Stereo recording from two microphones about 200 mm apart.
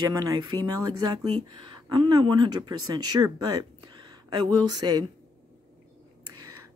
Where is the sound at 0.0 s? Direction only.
20° right (ahead or behind).